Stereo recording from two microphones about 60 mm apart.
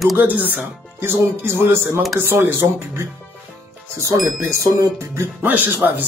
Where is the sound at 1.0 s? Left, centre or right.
Right.